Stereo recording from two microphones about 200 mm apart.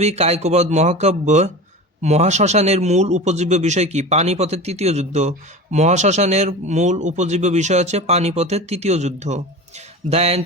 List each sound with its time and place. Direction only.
0.0 s speech: 30° right (ahead or behind)